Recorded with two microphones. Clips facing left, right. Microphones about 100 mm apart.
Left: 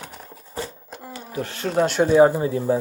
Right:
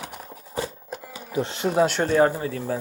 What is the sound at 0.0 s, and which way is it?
Horse, 10° right (ahead or behind).